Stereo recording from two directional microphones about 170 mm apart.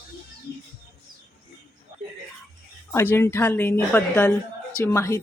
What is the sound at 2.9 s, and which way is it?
A woman's voice, 15° left (ahead or behind).